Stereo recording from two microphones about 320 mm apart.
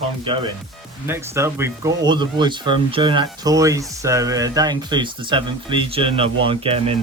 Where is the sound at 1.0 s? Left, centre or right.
Centre.